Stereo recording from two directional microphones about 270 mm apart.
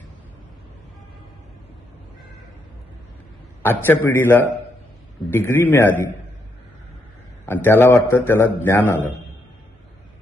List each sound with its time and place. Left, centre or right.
3.6 s a man's voice: centre
7.4 s a man's voice: centre